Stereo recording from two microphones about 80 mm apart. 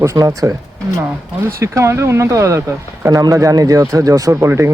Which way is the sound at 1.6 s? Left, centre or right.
Right.